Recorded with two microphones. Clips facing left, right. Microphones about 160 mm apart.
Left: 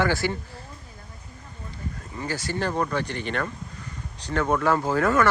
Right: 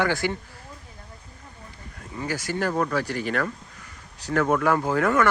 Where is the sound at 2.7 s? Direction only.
15° left (ahead or behind).